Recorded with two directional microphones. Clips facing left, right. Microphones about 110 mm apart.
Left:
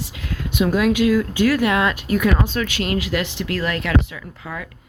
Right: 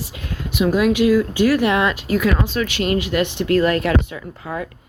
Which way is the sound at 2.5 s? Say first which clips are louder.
Right 2 dB; 15° right (ahead or behind).